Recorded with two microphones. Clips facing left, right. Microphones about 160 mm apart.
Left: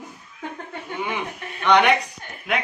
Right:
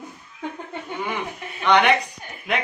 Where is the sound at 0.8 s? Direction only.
Centre (ahead or behind).